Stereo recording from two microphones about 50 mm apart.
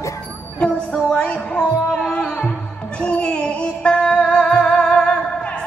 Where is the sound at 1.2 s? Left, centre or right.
Centre.